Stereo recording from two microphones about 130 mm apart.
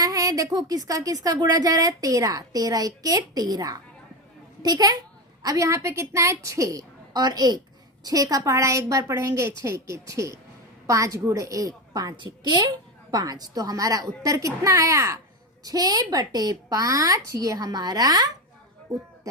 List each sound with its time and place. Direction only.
0.0 s a woman's voice: 25° right (ahead or behind)